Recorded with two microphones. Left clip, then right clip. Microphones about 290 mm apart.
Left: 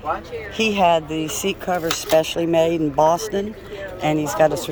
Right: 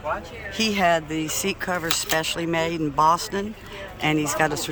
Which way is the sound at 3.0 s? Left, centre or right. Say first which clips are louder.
Left 2 dB; right.